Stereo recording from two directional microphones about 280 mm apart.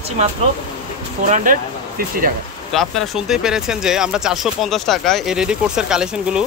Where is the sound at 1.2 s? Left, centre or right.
Right.